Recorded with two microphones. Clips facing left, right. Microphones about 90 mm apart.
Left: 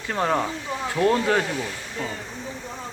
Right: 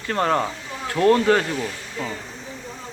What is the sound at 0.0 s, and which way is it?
Speech, 5° left (ahead or behind).